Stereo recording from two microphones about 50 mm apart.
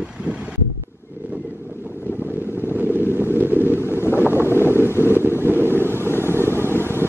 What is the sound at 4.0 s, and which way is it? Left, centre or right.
Vehicle, left.